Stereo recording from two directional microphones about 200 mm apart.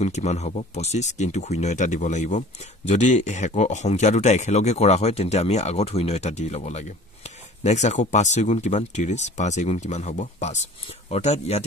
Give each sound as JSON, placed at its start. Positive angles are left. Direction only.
{"t": 0.0, "sound": "speech", "side_deg": 35}